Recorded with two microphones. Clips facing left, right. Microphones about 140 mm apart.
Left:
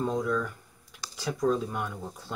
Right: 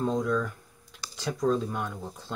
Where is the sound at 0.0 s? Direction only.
5° left (ahead or behind).